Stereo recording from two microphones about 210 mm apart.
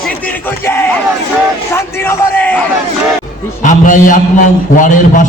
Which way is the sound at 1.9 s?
10° left (ahead or behind).